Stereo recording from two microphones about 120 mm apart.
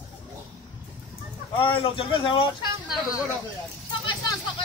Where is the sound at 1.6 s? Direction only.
50° left (ahead or behind).